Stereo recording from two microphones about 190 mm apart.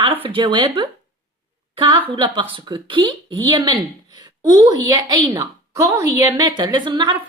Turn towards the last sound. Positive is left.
turn(degrees=-25)  # may be behind; listen again after turning